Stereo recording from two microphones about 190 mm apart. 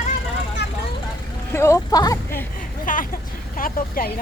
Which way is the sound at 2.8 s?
45° left (ahead or behind).